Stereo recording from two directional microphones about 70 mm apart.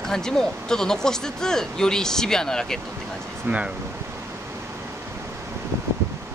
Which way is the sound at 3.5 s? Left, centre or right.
Right.